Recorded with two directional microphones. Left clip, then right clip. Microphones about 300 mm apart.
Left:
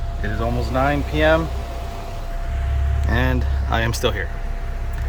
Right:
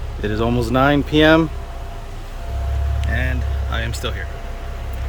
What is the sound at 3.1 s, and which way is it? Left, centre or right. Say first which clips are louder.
Vehicle: left 3 dB; centre.